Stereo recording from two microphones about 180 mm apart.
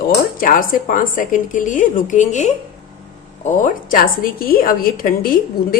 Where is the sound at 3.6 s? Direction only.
50° left (ahead or behind).